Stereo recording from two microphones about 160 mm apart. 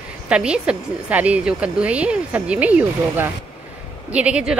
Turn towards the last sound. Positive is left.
turn(degrees=-5)  # may be behind; listen again after turning